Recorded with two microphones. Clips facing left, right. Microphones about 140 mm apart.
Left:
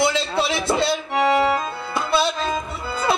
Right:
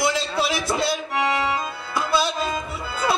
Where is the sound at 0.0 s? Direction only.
25° left (ahead or behind).